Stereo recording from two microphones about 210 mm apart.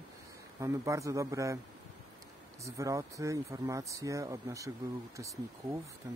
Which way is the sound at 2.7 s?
15° right (ahead or behind).